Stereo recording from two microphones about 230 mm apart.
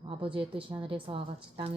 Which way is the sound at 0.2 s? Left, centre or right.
Right.